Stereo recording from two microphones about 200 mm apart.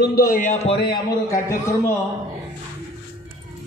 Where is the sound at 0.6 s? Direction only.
25° left (ahead or behind).